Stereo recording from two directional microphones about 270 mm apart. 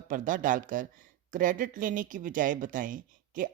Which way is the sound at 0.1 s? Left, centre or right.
Right.